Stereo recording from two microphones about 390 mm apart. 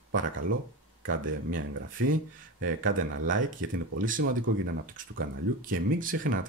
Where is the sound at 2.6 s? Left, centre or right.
Right.